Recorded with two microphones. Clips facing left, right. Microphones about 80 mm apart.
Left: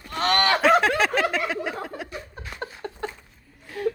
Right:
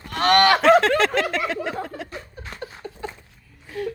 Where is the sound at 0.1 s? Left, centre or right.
Right.